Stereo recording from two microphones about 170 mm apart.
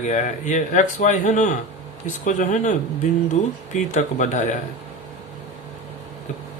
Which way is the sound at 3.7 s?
45° left (ahead or behind).